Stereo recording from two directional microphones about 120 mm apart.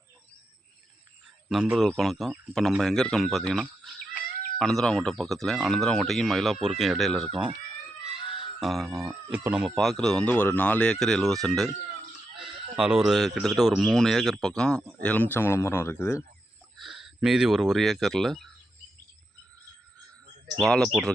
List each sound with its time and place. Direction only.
1.5 s speech: 5° right (ahead or behind)
3.6 s chicken: 10° right (ahead or behind)
4.5 s speech: 5° left (ahead or behind)
8.4 s speech: centre (ahead or behind)
9.6 s speech: 5° left (ahead or behind); by 16.2 s 20° left (ahead or behind)
16.7 s speech: centre (ahead or behind)
20.6 s speech: 5° left (ahead or behind)